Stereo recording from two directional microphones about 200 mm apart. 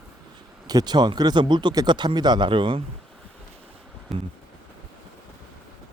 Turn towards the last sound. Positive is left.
turn(degrees=0)  # may be behind; listen again after turning